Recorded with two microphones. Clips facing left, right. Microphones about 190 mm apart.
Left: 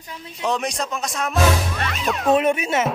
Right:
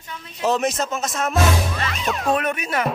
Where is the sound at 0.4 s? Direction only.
5° right (ahead or behind).